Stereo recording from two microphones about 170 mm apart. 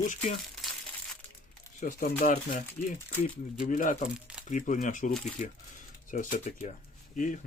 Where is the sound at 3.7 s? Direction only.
50° left (ahead or behind).